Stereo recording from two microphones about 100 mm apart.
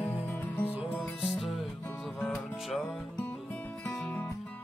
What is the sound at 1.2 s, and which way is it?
Music, centre (ahead or behind).